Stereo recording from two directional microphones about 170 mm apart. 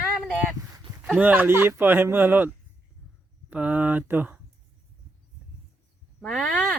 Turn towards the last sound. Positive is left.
turn(degrees=5)  # may be behind; listen again after turning